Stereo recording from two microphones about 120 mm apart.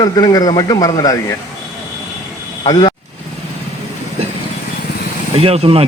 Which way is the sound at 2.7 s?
40° left (ahead or behind).